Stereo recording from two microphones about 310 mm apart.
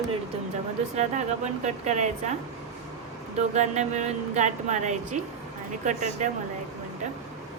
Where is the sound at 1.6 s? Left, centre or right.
Right.